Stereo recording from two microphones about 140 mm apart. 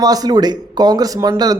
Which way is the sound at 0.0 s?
30° right (ahead or behind).